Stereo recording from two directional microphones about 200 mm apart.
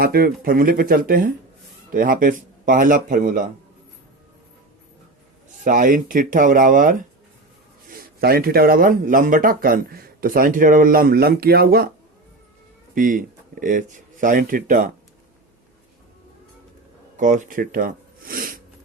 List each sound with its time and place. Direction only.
0.0 s speech: 50° right (ahead or behind)
5.6 s speech: 45° right (ahead or behind)
12.9 s speech: 40° right (ahead or behind)
17.2 s speech: 40° right (ahead or behind)